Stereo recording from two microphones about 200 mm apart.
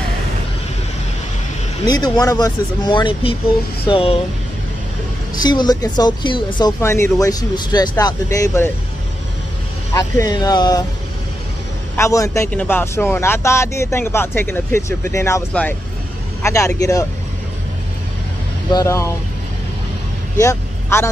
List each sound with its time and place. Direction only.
1.9 s speech: 20° left (ahead or behind)
5.4 s speech: 20° left (ahead or behind)
9.9 s speech: 20° left (ahead or behind)
12.0 s speech: 15° left (ahead or behind)
18.7 s speech: 15° left (ahead or behind)
20.3 s speech: 15° left (ahead or behind)